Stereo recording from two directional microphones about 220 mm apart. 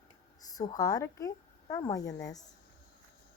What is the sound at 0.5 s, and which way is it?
Speech, 15° left (ahead or behind).